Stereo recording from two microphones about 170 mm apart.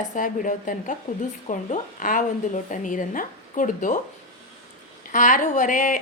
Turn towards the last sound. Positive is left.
turn(degrees=50)  # may be behind; listen again after turning